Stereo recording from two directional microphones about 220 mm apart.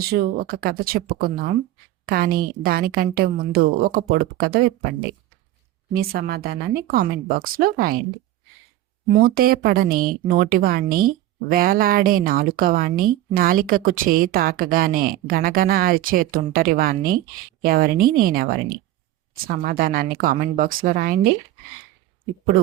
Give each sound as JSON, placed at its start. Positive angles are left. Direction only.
{"t": 0.0, "sound": "a woman's voice", "side_deg": -45}
{"t": 5.9, "sound": "a woman's voice", "side_deg": -45}
{"t": 9.1, "sound": "speech", "side_deg": -40}